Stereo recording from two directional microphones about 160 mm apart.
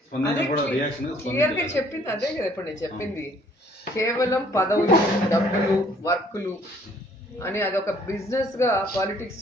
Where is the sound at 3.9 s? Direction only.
20° left (ahead or behind).